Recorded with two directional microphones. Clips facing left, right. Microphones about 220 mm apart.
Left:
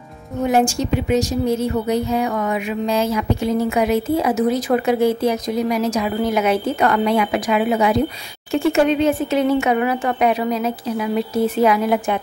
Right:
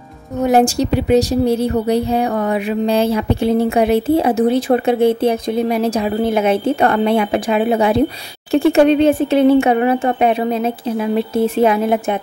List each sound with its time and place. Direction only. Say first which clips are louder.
0.5 s speech: right 4 dB; 35° right (ahead or behind)